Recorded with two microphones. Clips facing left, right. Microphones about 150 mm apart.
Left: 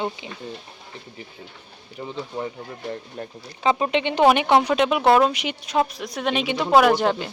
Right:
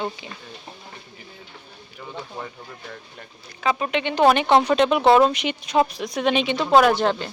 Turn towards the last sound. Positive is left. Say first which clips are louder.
# even
turn(degrees=10)  # may be behind; listen again after turning